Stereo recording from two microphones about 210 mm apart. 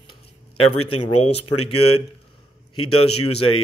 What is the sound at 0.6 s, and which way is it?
Speech, 25° left (ahead or behind).